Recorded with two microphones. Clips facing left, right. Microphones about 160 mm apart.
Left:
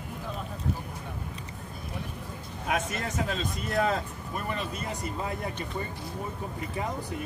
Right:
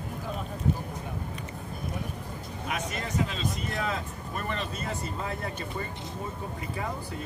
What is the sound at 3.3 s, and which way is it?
Speech, 45° left (ahead or behind).